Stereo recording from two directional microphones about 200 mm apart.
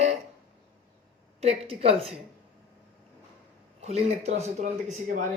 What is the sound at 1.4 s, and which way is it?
Speech, 30° right (ahead or behind).